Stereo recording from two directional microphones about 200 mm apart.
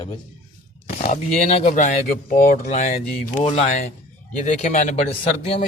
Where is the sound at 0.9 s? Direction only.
40° left (ahead or behind).